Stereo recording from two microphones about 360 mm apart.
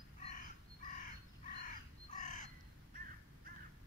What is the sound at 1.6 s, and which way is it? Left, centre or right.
Crow, left.